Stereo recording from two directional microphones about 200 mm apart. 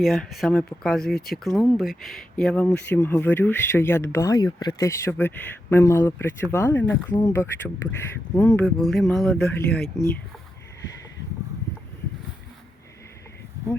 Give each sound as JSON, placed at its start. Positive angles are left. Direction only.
{"t": 0.0, "sound": "speech", "side_deg": 0}
{"t": 9.7, "sound": "speech", "side_deg": 50}